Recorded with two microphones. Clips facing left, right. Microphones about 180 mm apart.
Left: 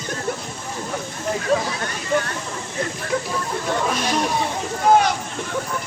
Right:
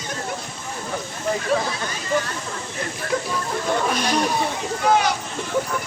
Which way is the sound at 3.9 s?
Centre (ahead or behind).